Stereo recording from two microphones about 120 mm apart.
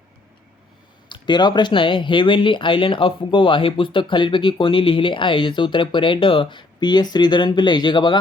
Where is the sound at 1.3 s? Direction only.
40° left (ahead or behind).